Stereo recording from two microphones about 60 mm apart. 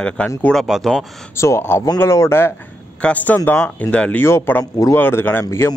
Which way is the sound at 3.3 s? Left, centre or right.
Left.